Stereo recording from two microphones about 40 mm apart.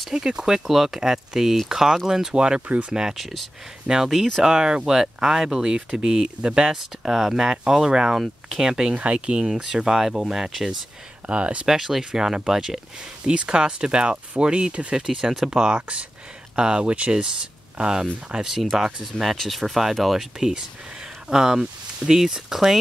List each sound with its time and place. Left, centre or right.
0.1 s speech: centre
2.3 s speech: right
2.9 s speech: centre
3.2 s speech: centre; by 7.1 s right
7.1 s speech: centre
8.2 s speech: centre
8.6 s speech: centre
8.9 s speech: right; by 10.5 s centre
11.2 s speech: right
11.6 s speech: centre
13.2 s speech: right
15.0 s speech: centre
19.4 s speech: centre